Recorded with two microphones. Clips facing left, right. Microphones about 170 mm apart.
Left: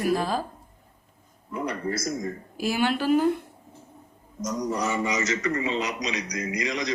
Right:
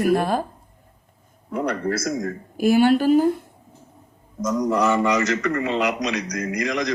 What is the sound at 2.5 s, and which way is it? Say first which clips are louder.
Speech: right 9 dB; 50° right (ahead or behind).